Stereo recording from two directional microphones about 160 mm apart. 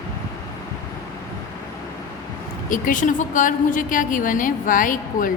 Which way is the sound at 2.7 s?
55° left (ahead or behind).